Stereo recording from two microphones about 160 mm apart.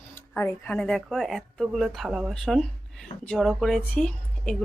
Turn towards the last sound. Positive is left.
turn(degrees=5)  # may be behind; listen again after turning